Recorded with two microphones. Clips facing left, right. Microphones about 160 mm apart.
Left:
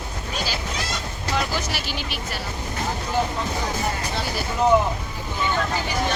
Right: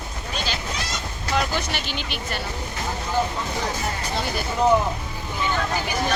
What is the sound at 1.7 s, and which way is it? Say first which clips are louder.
Speech: even; 5° left (ahead or behind).